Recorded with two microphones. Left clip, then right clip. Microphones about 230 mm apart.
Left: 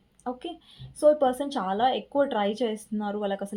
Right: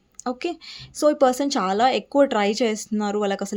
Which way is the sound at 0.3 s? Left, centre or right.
Right.